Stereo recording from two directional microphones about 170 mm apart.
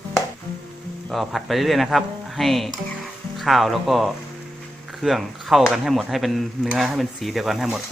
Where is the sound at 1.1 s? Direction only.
Centre (ahead or behind).